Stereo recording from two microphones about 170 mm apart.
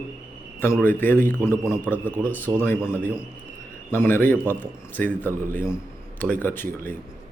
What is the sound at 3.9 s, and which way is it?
A man's voice, 10° left (ahead or behind).